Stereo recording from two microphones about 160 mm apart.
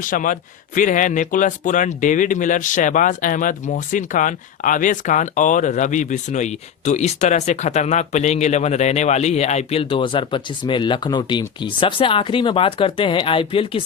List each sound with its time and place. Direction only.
0.0 s speech: 55° left (ahead or behind); by 13.8 s 35° left (ahead or behind)